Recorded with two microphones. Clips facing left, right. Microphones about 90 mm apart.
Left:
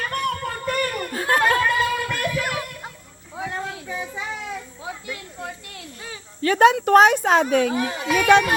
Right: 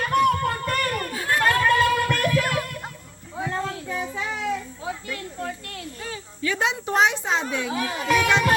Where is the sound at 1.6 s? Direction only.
5° left (ahead or behind).